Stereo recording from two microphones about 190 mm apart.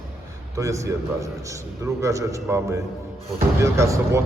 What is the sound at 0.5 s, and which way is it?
A man's voice, 15° right (ahead or behind).